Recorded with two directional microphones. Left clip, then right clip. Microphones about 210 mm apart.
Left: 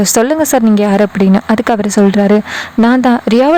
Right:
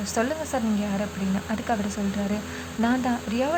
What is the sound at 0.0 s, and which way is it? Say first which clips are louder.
Speech: left 16 dB; 50° left (ahead or behind).